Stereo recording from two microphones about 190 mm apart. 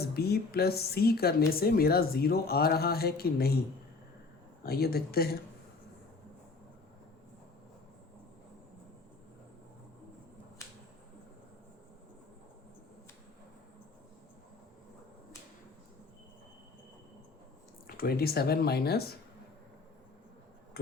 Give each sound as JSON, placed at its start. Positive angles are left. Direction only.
{"t": 0.0, "sound": "speech", "side_deg": 55}
{"t": 4.6, "sound": "speech", "side_deg": 55}
{"t": 17.8, "sound": "speech", "side_deg": 50}
{"t": 20.8, "sound": "speech", "side_deg": 55}